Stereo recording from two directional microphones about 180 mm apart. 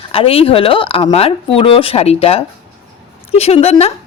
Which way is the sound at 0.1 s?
30° left (ahead or behind).